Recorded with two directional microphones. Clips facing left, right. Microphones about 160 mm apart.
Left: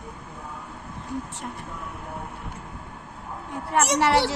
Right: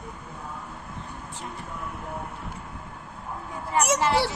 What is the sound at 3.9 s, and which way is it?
Speech, 70° left (ahead or behind).